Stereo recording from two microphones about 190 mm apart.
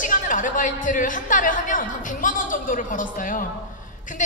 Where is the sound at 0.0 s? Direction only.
45° left (ahead or behind).